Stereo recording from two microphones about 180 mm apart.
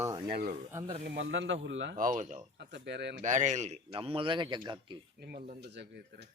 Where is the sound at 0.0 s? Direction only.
20° right (ahead or behind).